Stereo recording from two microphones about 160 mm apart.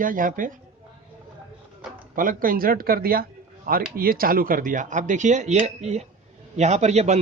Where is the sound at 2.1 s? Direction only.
60° right (ahead or behind).